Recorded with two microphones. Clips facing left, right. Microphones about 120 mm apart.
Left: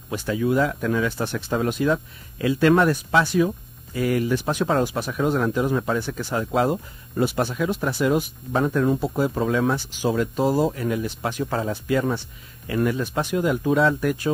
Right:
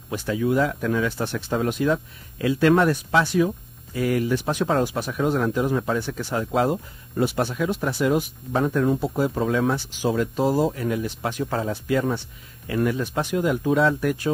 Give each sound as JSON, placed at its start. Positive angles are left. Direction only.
{"t": 0.1, "sound": "speech", "side_deg": 10}